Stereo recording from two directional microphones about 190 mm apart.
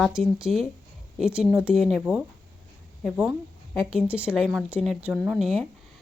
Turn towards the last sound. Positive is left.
turn(degrees=0)  # may be behind; listen again after turning